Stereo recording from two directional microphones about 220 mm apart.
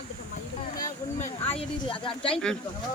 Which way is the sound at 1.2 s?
25° left (ahead or behind).